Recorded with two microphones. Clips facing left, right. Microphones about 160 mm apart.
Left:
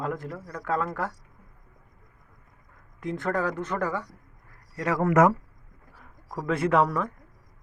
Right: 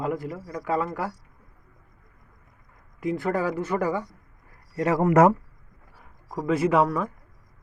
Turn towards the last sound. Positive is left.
turn(degrees=-5)  # may be behind; listen again after turning